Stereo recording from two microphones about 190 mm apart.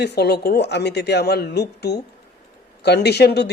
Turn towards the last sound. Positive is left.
turn(degrees=60)  # may be behind; listen again after turning